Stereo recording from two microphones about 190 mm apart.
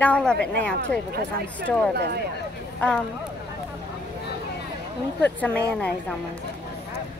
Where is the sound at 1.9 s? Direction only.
60° right (ahead or behind).